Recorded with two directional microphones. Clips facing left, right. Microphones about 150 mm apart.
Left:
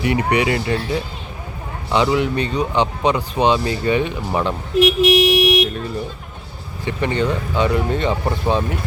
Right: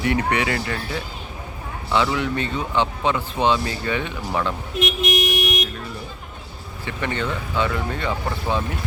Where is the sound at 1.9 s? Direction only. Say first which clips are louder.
Left 4 dB; 20° left (ahead or behind).